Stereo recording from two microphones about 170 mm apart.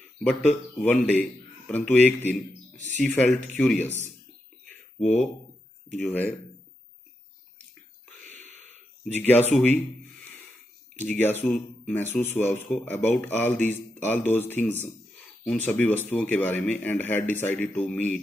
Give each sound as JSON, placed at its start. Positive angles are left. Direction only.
{"t": 0.2, "sound": "speech", "side_deg": 5}
{"t": 5.9, "sound": "speech", "side_deg": 10}
{"t": 8.4, "sound": "a sound", "side_deg": -45}
{"t": 9.0, "sound": "speech", "side_deg": 10}
{"t": 11.0, "sound": "speech", "side_deg": 10}